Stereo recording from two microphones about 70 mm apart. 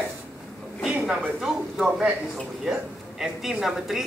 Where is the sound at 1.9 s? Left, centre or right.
Right.